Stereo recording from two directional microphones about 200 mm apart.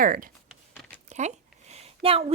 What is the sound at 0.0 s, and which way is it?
Speech, 45° right (ahead or behind).